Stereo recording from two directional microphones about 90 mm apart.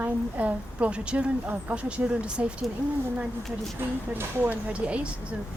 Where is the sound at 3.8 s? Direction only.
25° right (ahead or behind).